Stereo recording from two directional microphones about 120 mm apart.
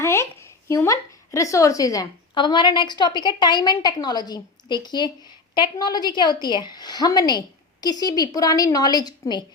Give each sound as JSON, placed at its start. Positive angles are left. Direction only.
{"t": 0.0, "sound": "speech", "side_deg": 25}
{"t": 2.3, "sound": "a woman's voice", "side_deg": 40}